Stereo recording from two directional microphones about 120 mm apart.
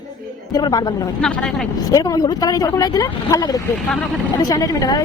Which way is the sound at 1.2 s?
10° left (ahead or behind).